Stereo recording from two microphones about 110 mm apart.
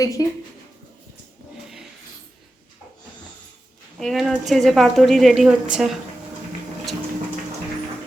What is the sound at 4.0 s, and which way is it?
Speech, centre (ahead or behind).